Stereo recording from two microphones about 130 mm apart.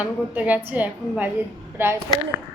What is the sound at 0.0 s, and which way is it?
A woman's voice, 10° right (ahead or behind).